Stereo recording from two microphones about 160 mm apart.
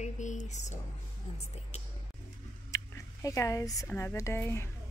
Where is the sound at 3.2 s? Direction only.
20° left (ahead or behind).